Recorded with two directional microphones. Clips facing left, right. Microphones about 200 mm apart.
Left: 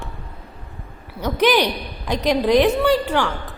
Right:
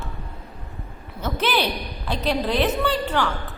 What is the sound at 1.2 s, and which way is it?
A woman's voice, 15° left (ahead or behind).